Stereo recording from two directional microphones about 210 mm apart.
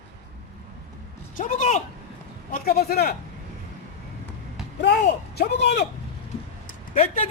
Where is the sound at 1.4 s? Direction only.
35° left (ahead or behind).